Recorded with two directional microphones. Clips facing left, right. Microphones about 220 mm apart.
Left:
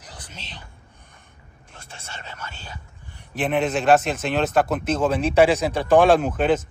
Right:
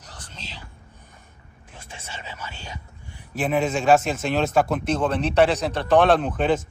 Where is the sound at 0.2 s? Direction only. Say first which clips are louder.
Right 4 dB; 90° left.